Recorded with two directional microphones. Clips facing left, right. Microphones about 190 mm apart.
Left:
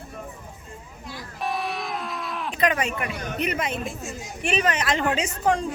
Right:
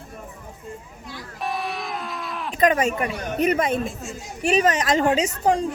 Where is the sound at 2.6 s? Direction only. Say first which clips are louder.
Right 5 dB; 45° right (ahead or behind).